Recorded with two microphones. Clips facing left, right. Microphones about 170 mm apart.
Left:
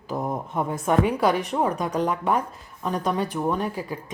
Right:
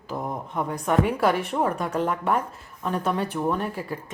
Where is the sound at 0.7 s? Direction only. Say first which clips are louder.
Left 1 dB; centre (ahead or behind).